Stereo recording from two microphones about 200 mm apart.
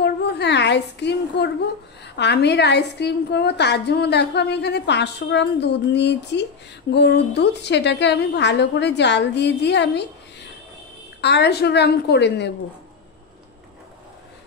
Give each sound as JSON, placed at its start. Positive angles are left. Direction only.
{"t": 0.0, "sound": "a sound", "side_deg": 55}
{"t": 2.1, "sound": "a woman's voice", "side_deg": 55}
{"t": 11.1, "sound": "a woman's voice", "side_deg": 60}